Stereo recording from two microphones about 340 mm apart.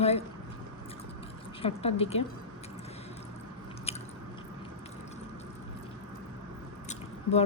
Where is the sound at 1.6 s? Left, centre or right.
Centre.